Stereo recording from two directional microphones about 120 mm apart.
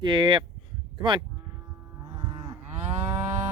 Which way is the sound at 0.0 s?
40° right (ahead or behind).